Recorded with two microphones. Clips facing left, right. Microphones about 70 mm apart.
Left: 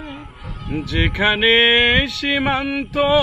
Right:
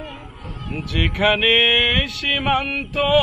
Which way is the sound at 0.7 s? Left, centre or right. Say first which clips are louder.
Left 3 dB; left.